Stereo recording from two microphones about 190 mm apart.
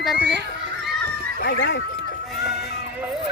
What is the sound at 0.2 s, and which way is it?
Speech, 65° right (ahead or behind).